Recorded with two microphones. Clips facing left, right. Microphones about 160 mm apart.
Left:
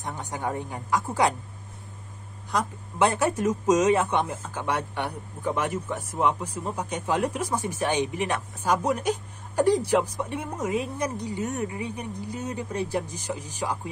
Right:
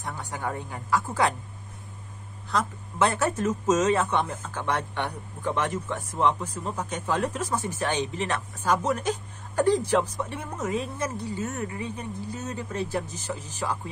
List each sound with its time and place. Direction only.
0.0 s a woman's voice: 20° left (ahead or behind)
2.5 s speech: 15° left (ahead or behind)